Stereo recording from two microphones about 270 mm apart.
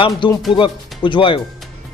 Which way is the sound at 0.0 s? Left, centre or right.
Centre.